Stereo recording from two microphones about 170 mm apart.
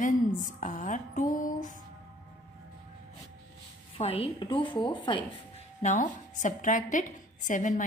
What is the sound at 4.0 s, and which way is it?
A woman's voice, 35° left (ahead or behind).